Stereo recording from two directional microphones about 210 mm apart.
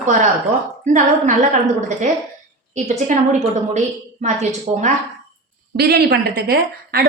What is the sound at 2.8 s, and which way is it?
A woman's voice, 35° right (ahead or behind).